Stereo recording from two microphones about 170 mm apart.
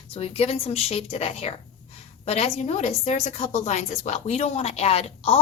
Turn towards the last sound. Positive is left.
turn(degrees=35)  # may be behind; listen again after turning